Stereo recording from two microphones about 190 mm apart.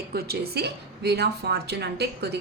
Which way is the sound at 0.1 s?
55° right (ahead or behind).